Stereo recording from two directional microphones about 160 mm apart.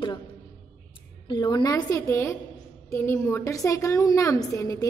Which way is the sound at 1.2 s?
25° left (ahead or behind).